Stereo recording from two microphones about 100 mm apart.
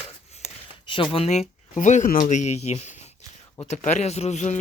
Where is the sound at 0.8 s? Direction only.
55° left (ahead or behind).